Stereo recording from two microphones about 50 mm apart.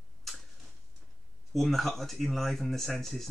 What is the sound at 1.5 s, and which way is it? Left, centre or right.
Speech, centre.